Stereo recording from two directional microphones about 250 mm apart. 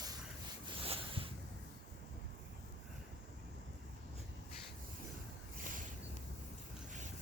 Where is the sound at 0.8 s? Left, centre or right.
Right.